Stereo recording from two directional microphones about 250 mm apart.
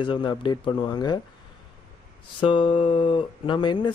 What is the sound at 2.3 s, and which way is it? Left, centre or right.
Speech, centre.